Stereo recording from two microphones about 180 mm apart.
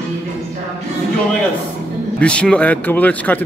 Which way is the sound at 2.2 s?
5° left (ahead or behind).